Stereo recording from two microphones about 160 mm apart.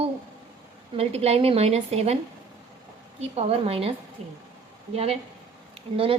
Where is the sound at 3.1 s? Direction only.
40° right (ahead or behind).